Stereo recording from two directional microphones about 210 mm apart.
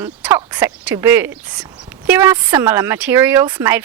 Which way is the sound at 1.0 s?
10° right (ahead or behind).